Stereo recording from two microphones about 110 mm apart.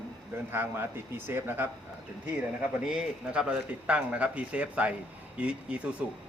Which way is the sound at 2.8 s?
5° right (ahead or behind).